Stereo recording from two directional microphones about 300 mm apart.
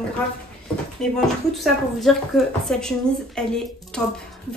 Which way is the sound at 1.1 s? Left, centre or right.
Centre.